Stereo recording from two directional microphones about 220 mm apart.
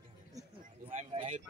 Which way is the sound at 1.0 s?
30° right (ahead or behind).